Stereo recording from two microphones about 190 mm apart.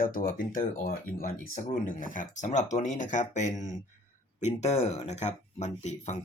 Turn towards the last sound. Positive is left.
turn(degrees=35)  # may be behind; listen again after turning